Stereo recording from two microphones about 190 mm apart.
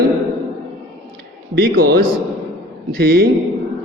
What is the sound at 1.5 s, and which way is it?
A man's voice, 55° right (ahead or behind).